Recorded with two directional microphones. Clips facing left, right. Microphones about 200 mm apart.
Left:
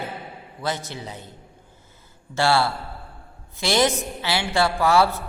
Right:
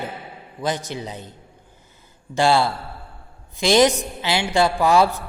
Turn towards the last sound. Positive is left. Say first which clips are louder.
# right 2 dB
turn(degrees=-15)  # may be behind; listen again after turning